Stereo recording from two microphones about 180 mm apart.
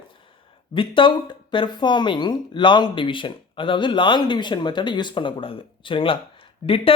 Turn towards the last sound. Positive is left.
turn(degrees=30)  # may be behind; listen again after turning